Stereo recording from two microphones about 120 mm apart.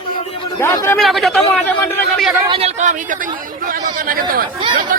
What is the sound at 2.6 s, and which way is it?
Speech, 85° right.